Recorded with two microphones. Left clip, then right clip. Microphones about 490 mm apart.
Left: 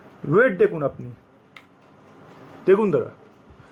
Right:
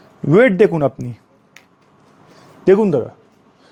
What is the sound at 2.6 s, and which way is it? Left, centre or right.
Speech, right.